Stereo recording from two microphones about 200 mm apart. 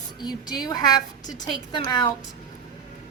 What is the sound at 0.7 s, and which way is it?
A woman's voice, 20° left (ahead or behind).